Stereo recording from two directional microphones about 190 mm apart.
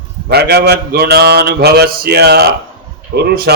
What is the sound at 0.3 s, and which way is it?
A man's voice, 55° right (ahead or behind).